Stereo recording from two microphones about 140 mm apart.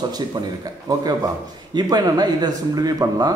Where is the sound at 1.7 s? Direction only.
30° right (ahead or behind).